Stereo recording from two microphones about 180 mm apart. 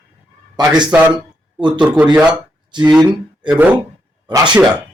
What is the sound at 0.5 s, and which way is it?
A man's voice, 25° right (ahead or behind).